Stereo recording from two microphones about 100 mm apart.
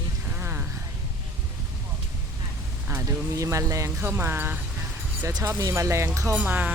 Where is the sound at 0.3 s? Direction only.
20° right (ahead or behind).